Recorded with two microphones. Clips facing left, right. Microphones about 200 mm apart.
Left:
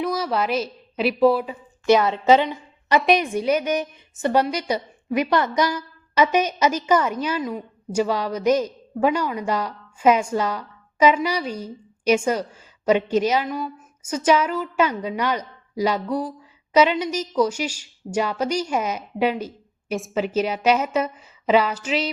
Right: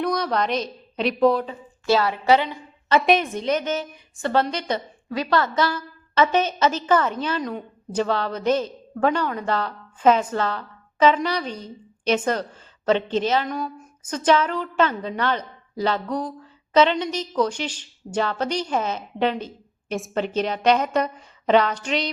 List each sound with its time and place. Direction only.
0.0 s a woman's voice: 5° left (ahead or behind)
1.9 s a woman's voice: 20° left (ahead or behind)
3.0 s a woman's voice: centre (ahead or behind)